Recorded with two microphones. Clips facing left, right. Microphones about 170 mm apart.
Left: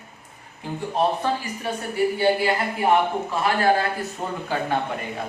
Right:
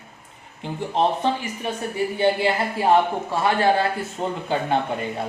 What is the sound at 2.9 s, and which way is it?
A man's voice, 25° right (ahead or behind).